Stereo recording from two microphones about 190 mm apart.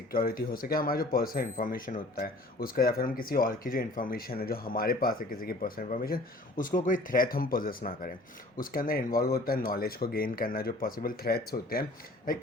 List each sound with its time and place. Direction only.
0.1 s speech: 50° left (ahead or behind)